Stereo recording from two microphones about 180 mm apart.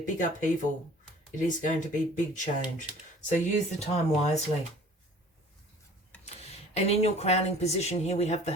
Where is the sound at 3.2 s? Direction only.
40° left (ahead or behind).